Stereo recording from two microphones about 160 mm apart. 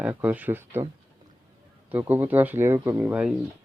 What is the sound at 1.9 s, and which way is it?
Speech, 10° right (ahead or behind).